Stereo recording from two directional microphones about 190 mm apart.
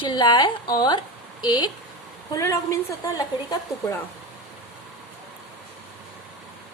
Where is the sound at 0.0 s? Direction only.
25° left (ahead or behind).